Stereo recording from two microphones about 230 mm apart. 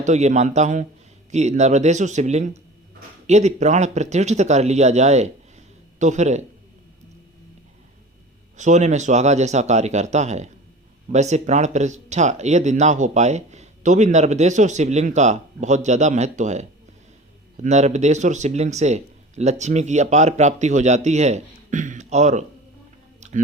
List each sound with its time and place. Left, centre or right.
0.0 s speech: right
8.5 s speech: right
23.2 s a sound: right